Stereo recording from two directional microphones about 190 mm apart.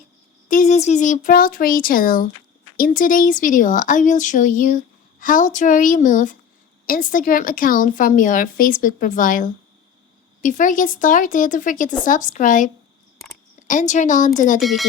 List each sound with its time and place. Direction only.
0.4 s a woman's voice: 40° left (ahead or behind)
14.6 s speech: centre (ahead or behind)